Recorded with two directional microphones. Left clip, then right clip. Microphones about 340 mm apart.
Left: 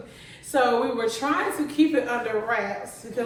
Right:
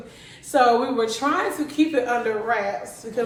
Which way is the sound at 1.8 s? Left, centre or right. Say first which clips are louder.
Right 2 dB; centre.